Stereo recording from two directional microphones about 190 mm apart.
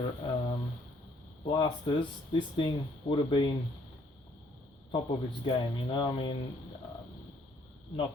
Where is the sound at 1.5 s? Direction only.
25° left (ahead or behind).